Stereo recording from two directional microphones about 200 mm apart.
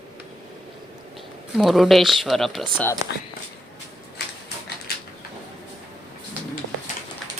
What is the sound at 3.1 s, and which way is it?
Speech, 60° left (ahead or behind).